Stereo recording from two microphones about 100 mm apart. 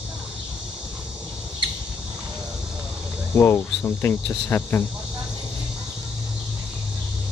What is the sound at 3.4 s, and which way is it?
Cricket, 25° left (ahead or behind).